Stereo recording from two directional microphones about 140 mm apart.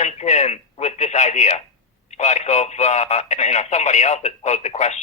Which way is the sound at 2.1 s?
55° left (ahead or behind).